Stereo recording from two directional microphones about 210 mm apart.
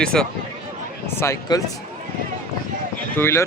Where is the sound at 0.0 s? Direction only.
5° left (ahead or behind).